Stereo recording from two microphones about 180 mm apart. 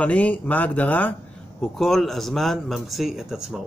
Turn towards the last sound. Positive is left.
turn(degrees=0)  # may be behind; listen again after turning